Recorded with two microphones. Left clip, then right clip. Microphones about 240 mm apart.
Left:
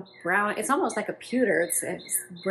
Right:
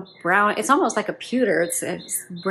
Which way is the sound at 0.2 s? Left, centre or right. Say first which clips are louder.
Right 6 dB; centre.